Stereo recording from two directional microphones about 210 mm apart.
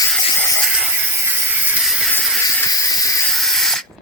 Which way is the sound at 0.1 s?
10° left (ahead or behind).